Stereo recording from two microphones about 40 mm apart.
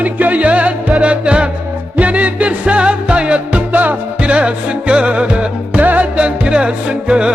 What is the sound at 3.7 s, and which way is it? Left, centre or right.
Music, right.